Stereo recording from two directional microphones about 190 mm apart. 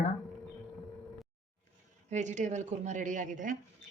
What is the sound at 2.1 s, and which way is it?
A woman's voice, 40° right (ahead or behind).